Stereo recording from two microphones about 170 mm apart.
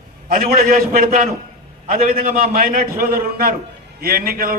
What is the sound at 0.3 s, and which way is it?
Speech, 65° right (ahead or behind).